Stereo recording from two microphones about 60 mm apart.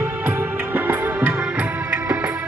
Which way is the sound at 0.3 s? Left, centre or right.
Right.